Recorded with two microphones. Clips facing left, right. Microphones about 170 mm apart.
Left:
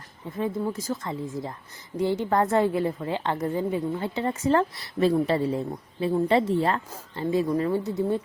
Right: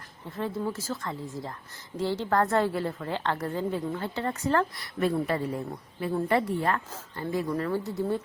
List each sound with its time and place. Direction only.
0.3 s a woman's voice: 15° left (ahead or behind)